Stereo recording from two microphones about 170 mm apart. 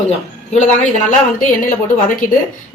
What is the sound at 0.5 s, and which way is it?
Speech, 45° left (ahead or behind).